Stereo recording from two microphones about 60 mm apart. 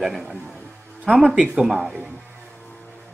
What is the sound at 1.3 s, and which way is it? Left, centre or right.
Speech, centre.